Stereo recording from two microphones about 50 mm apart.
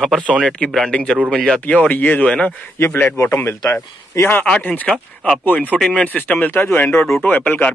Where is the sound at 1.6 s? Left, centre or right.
Left.